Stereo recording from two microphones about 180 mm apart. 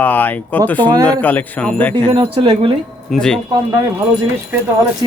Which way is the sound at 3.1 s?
5° left (ahead or behind).